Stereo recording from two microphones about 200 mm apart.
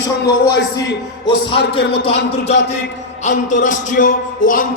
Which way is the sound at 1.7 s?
25° left (ahead or behind).